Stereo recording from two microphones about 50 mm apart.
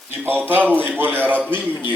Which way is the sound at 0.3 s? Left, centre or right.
Right.